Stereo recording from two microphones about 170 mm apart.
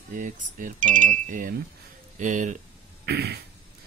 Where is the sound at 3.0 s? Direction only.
70° right (ahead or behind).